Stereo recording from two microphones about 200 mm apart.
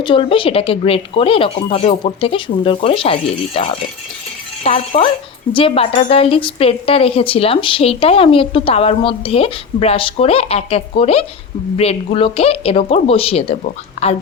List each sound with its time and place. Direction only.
0.0 s a woman's voice: 25° left (ahead or behind)